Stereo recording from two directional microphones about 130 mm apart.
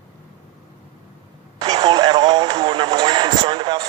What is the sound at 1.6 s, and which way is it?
Radio, 45° right (ahead or behind).